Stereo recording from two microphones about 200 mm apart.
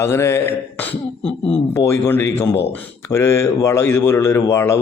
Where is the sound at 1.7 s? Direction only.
15° left (ahead or behind).